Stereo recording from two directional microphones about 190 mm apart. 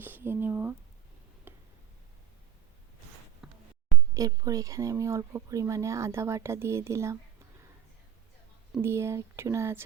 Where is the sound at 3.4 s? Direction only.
5° right (ahead or behind).